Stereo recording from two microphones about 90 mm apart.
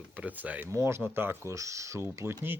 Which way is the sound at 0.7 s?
30° right (ahead or behind).